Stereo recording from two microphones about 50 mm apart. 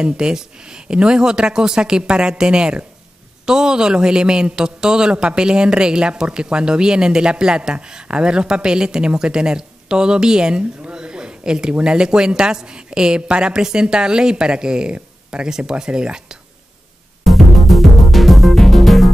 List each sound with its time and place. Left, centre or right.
0.0 s speech: centre
17.2 s music: centre